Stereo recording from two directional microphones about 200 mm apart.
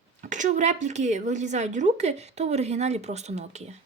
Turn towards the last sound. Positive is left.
turn(degrees=-35)  # may be behind; listen again after turning